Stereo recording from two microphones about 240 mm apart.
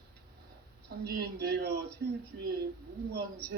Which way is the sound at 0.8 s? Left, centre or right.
Right.